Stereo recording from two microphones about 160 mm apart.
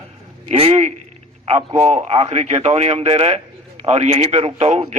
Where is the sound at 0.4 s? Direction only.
40° right (ahead or behind).